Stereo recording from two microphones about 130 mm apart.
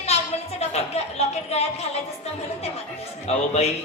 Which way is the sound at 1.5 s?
55° left (ahead or behind).